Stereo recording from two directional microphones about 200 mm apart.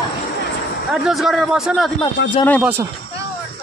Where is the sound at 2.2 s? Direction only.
65° left (ahead or behind).